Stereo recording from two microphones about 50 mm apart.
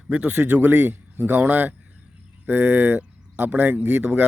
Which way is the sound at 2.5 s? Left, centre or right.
Right.